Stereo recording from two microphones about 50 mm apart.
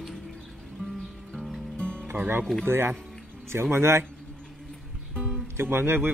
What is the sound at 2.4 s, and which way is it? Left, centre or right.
Speech, centre.